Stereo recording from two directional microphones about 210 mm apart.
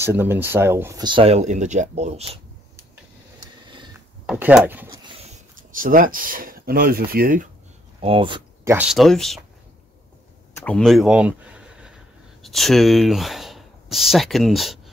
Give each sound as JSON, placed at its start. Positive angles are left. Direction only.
{"t": 0.0, "sound": "speech", "side_deg": -10}
{"t": 4.3, "sound": "speech", "side_deg": -5}
{"t": 5.6, "sound": "speech", "side_deg": -40}
{"t": 8.0, "sound": "speech", "side_deg": -25}
{"t": 8.6, "sound": "speech", "side_deg": -5}
{"t": 10.5, "sound": "speech", "side_deg": 5}